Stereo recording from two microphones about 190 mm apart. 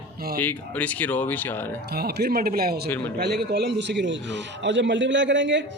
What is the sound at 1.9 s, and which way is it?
A man's voice, 55° right (ahead or behind).